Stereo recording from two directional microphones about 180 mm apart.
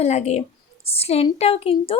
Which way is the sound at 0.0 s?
40° left (ahead or behind).